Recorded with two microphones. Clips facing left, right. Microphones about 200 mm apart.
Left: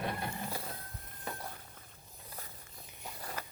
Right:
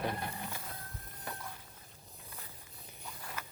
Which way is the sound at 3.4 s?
35° left (ahead or behind).